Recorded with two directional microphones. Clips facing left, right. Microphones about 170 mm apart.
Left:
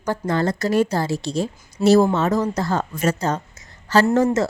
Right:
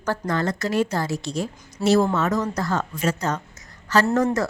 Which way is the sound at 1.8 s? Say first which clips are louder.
Left 4 dB; 20° left (ahead or behind).